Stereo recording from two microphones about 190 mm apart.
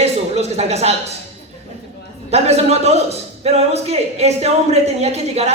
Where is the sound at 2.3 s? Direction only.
35° right (ahead or behind).